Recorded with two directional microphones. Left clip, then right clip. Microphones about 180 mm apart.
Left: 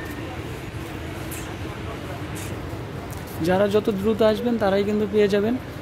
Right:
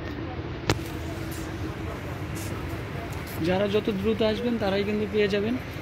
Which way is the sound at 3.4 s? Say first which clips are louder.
Left 5 dB; 15° left (ahead or behind).